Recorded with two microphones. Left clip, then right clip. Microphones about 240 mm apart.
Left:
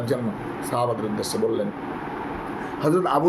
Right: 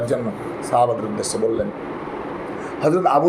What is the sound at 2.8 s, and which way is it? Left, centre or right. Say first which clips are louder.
Speech: right 5 dB; centre.